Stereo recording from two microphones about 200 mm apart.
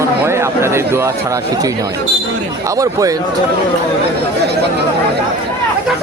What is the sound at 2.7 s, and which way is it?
Speech, 15° right (ahead or behind).